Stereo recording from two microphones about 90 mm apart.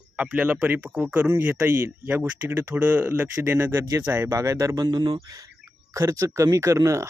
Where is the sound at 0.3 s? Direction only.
15° right (ahead or behind); by 4.9 s 40° right (ahead or behind).